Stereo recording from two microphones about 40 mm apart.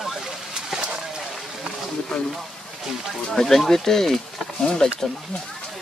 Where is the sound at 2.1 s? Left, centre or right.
Centre.